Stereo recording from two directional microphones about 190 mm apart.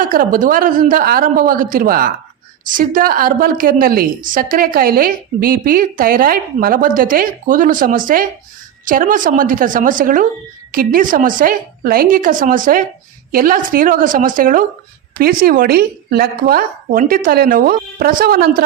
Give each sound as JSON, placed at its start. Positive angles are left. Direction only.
{"t": 0.1, "sound": "a woman's voice", "side_deg": -45}